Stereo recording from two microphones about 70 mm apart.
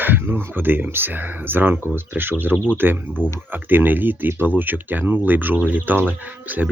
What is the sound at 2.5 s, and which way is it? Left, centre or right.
Speech, centre.